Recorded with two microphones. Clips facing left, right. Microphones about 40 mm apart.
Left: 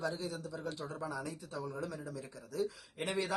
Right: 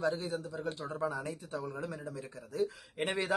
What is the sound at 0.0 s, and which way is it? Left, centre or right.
A man's voice, right.